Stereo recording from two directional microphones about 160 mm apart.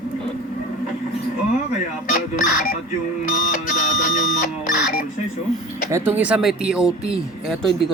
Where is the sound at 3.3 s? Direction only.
55° left (ahead or behind).